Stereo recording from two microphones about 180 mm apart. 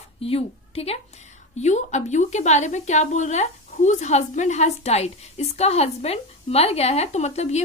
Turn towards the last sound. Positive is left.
turn(degrees=40)  # may be behind; listen again after turning